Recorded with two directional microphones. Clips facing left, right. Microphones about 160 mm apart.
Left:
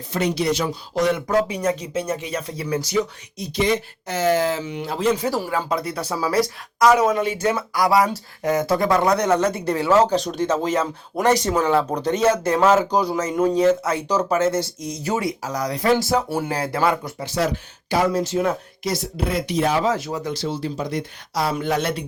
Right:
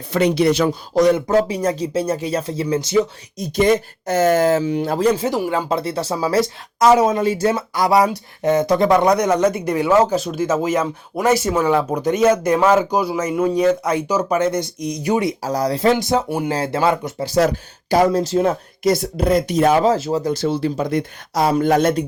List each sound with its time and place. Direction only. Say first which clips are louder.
0.1 s speech: right 6 dB; 70° right (ahead or behind)
0.9 s speech: right 5 dB; 40° right (ahead or behind); by 3.0 s 25° right (ahead or behind)
3.4 s speech: right 5 dB; 45° right (ahead or behind)
5.1 s speech: right 3 dB; 20° right (ahead or behind)
15.4 s speech: right 3 dB; 30° right (ahead or behind)
17.2 s speech: right 6 dB; 40° right (ahead or behind)
18.8 s speech: right 7 dB; 50° right (ahead or behind)
19.8 s speech: right 5 dB; 30° right (ahead or behind)
20.3 s speech: right 6 dB; 55° right (ahead or behind)